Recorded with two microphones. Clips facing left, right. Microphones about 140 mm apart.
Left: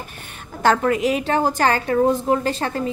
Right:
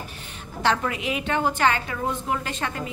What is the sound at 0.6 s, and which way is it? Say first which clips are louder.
A woman's voice: left 7 dB; 45° left (ahead or behind).